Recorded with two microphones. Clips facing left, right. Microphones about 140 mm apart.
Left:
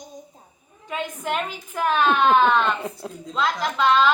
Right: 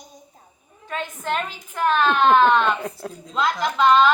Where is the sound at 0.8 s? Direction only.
15° left (ahead or behind).